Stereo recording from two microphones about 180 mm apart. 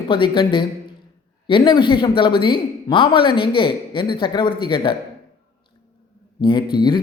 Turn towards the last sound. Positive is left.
turn(degrees=25)  # may be behind; listen again after turning